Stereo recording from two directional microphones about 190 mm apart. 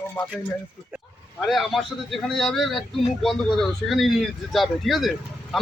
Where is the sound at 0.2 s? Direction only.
5° left (ahead or behind).